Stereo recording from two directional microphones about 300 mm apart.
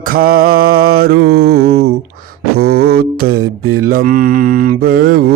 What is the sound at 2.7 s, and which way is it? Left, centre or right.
Mantra, right.